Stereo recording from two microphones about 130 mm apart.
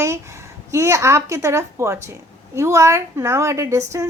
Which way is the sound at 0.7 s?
20° right (ahead or behind).